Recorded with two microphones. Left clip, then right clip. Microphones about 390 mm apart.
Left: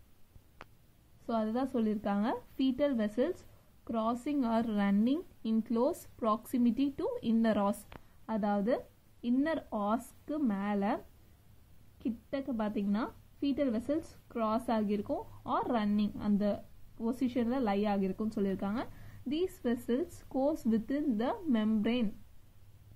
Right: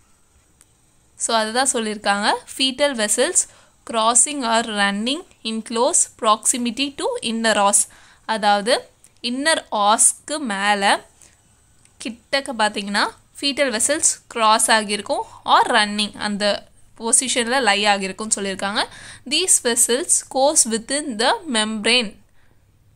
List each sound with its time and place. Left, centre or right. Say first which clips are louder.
1.4 s a woman's voice: right 14 dB; centre
12.0 s a woman's voice: right 15 dB; centre
20.2 s speech: right 15 dB; centre
20.7 s a woman's voice: right 10 dB; centre